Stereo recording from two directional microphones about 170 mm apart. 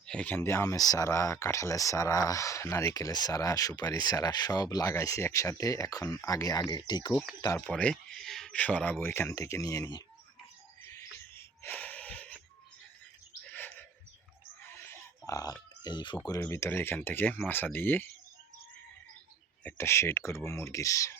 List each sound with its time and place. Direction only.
0.0 s speech: 5° left (ahead or behind); by 7.1 s 25° left (ahead or behind)
7.1 s speech: centre (ahead or behind); by 10.0 s 20° left (ahead or behind)
10.8 s a sound: 15° left (ahead or behind)
13.4 s bird: 10° left (ahead or behind)
14.6 s a sound: 15° left (ahead or behind)
15.3 s speech: 20° left (ahead or behind)
16.4 s speech: 15° left (ahead or behind)
19.6 s speech: 15° left (ahead or behind)